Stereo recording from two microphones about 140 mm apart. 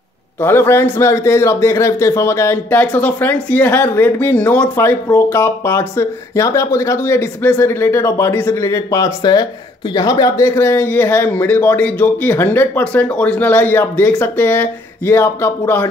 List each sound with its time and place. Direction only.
0.4 s a man's voice: 15° left (ahead or behind)